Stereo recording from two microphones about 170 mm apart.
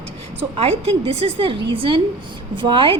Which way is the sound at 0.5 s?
35° right (ahead or behind).